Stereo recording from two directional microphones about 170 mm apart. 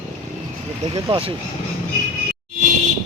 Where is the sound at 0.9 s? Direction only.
30° right (ahead or behind).